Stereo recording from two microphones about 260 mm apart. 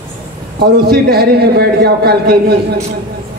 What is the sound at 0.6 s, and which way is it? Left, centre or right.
A man's voice, right.